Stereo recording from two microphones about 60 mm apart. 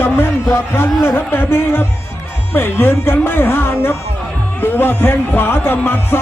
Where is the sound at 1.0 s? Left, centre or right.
Left.